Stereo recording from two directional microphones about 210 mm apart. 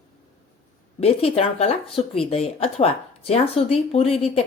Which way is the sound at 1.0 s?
30° left (ahead or behind).